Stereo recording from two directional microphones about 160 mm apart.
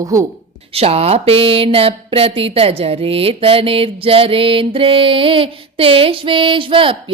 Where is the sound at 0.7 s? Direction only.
40° right (ahead or behind).